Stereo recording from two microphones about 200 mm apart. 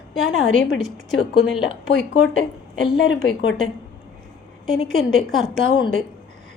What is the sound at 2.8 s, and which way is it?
Speech, 65° left (ahead or behind).